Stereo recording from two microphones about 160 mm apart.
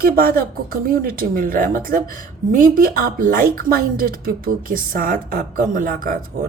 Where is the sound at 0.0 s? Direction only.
65° right (ahead or behind).